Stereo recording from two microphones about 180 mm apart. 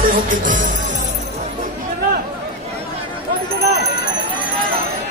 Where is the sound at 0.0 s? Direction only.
45° right (ahead or behind).